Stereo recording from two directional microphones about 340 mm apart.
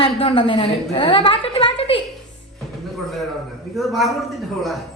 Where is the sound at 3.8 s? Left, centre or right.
Centre.